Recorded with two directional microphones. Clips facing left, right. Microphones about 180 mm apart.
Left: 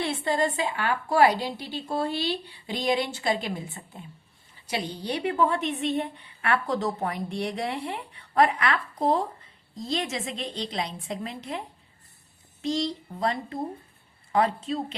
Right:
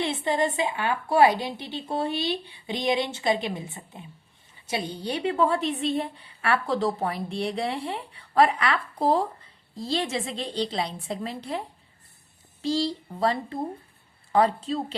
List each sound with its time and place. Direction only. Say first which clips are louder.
0.0 s a woman's voice: right 1 dB; 20° right (ahead or behind)
12.6 s a woman's voice: right 2 dB; 30° right (ahead or behind)